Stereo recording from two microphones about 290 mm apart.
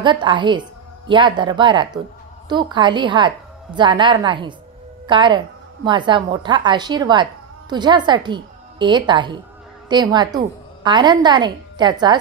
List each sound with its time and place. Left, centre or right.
0.0 s a woman's voice: centre